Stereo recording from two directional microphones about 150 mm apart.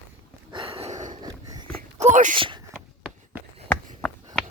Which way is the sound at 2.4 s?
35° right (ahead or behind).